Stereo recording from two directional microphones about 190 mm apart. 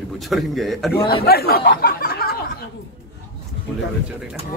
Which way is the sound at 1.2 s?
55° left (ahead or behind).